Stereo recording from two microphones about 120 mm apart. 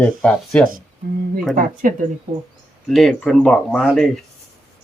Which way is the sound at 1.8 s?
90° right.